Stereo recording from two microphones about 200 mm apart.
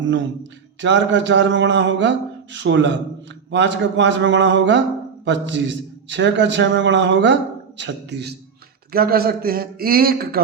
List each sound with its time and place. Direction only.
0.0 s a man's voice: 65° right (ahead or behind); by 10.4 s 50° right (ahead or behind)